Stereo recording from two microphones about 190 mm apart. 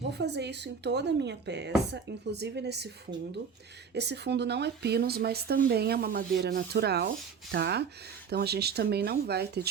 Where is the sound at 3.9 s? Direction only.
65° right (ahead or behind).